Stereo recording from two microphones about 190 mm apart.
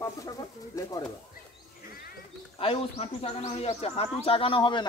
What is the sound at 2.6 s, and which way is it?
A man's voice, 30° left (ahead or behind).